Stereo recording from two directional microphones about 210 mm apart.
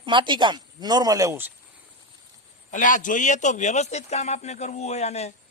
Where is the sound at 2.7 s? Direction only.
40° left (ahead or behind).